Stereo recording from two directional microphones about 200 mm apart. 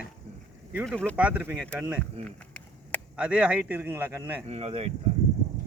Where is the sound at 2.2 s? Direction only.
5° left (ahead or behind).